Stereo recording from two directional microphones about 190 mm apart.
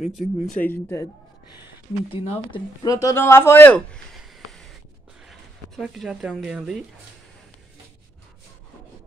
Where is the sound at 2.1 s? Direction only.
25° left (ahead or behind); by 6.8 s centre (ahead or behind).